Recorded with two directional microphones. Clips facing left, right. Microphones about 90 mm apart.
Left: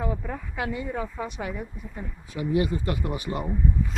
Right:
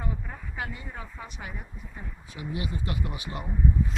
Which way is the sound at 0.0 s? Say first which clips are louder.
Left 7 dB; 85° left.